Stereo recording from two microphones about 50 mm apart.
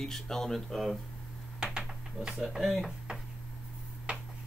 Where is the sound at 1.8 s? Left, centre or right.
Centre.